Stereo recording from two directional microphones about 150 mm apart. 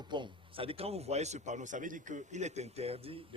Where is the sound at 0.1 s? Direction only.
35° right (ahead or behind).